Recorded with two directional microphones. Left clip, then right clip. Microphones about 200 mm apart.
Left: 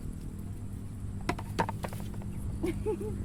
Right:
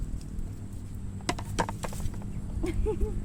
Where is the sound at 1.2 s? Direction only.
50° right (ahead or behind).